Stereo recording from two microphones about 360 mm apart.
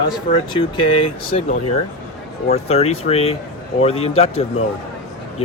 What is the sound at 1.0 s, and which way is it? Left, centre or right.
Speech, centre.